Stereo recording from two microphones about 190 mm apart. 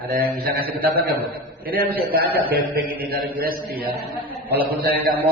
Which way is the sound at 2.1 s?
55° right (ahead or behind).